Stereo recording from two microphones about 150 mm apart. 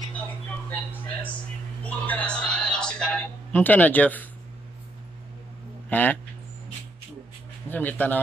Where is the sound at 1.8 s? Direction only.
10° left (ahead or behind).